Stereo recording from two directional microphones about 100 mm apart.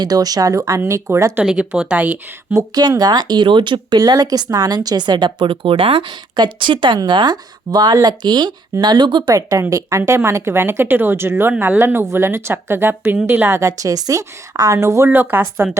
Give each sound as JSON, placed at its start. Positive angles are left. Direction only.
{"t": 0.0, "sound": "a woman's voice", "side_deg": -40}
{"t": 1.5, "sound": "speech", "side_deg": -10}
{"t": 2.5, "sound": "a woman's voice", "side_deg": -35}